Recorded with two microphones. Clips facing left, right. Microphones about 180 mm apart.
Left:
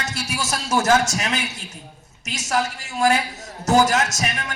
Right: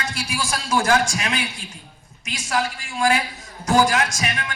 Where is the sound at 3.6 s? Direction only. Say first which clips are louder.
Left 1 dB; 40° left (ahead or behind).